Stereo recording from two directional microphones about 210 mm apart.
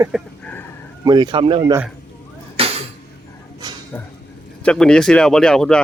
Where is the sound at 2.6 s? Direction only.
25° right (ahead or behind).